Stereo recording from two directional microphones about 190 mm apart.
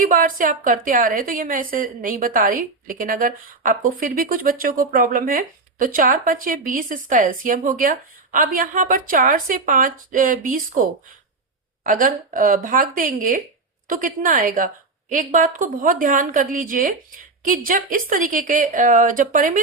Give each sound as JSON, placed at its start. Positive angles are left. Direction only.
{"t": 0.0, "sound": "a woman's voice", "side_deg": -45}